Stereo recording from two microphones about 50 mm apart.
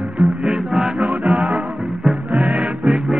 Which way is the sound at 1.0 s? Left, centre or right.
Centre.